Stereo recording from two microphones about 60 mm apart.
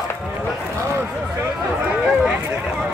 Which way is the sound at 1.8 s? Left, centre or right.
Centre.